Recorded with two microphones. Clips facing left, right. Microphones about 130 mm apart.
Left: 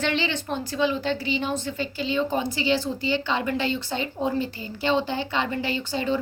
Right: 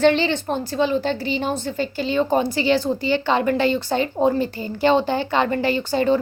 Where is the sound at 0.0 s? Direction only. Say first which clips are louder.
Right 9 dB; 40° right (ahead or behind).